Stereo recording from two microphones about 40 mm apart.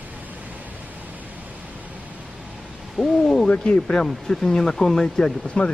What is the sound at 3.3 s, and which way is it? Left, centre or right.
Speech, left.